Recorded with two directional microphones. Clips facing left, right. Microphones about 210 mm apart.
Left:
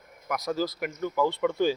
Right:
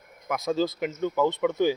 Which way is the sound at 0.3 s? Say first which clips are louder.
Right 3 dB; 25° right (ahead or behind).